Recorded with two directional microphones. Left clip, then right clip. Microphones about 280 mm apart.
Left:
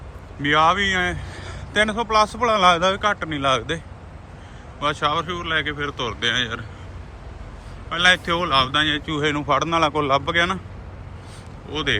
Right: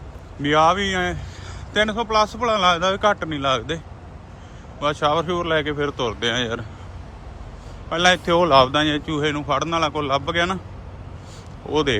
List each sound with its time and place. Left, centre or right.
0.4 s a man's voice: centre
7.9 s a man's voice: centre
11.7 s speech: centre